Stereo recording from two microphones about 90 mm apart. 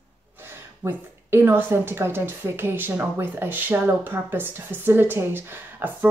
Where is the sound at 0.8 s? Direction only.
20° right (ahead or behind).